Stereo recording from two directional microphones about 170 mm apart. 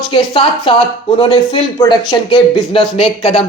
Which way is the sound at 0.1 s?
30° left (ahead or behind).